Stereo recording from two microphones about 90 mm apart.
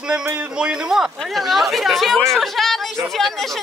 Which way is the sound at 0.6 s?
10° right (ahead or behind).